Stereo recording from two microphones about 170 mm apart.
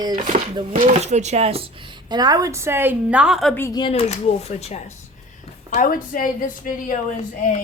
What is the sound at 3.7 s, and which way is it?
Speech, 30° left (ahead or behind).